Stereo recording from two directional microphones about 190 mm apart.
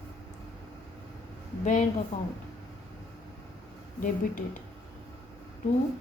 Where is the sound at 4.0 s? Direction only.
45° left (ahead or behind).